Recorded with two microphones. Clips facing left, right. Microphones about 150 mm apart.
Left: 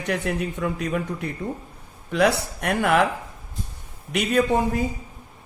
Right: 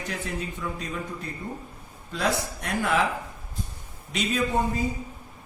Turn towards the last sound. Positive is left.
turn(degrees=80)